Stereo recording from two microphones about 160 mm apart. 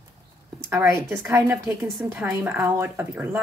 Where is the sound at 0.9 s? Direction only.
10° right (ahead or behind).